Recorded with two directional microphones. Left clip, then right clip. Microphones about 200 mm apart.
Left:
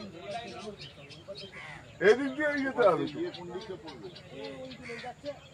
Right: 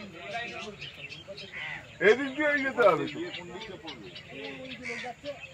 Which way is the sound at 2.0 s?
40° right (ahead or behind).